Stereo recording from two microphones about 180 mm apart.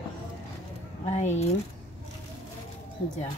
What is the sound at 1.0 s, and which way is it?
Speech, 40° left (ahead or behind).